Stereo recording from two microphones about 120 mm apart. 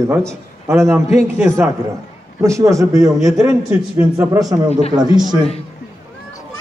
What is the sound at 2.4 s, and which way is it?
A man's voice, 25° right (ahead or behind).